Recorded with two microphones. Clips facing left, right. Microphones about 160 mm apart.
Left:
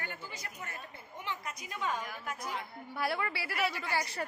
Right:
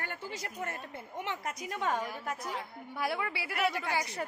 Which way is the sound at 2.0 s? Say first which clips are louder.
Right 4 dB; 30° right (ahead or behind).